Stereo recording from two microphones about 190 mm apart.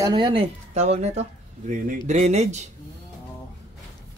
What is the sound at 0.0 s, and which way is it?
Speech, 20° right (ahead or behind).